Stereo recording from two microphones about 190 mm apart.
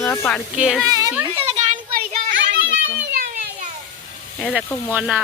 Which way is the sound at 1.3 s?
35° right (ahead or behind).